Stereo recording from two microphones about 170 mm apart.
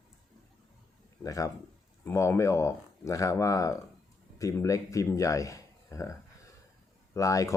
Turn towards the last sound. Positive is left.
turn(degrees=20)  # may be behind; listen again after turning